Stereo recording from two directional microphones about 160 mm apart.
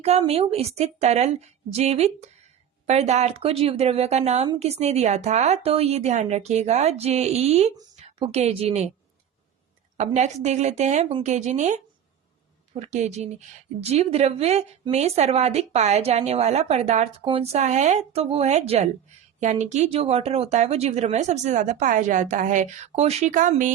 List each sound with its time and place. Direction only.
0.0 s a woman's voice: 40° right (ahead or behind)
10.0 s a woman's voice: 45° right (ahead or behind)